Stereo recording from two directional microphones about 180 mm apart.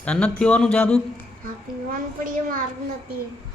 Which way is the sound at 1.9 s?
50° right (ahead or behind).